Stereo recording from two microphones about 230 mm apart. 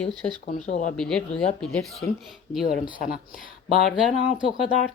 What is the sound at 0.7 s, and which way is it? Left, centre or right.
Speech, left.